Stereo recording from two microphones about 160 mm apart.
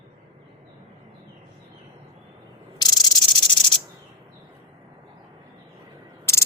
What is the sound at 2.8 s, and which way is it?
Insect, 25° left (ahead or behind).